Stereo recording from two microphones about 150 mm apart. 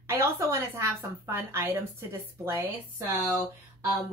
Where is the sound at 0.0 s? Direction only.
20° right (ahead or behind).